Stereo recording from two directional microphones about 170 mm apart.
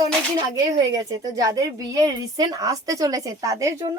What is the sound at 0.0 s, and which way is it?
Speech, 20° right (ahead or behind).